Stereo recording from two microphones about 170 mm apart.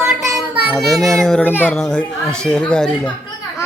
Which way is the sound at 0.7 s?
Centre (ahead or behind).